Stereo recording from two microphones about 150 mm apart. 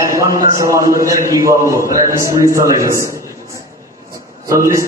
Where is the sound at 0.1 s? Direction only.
20° right (ahead or behind).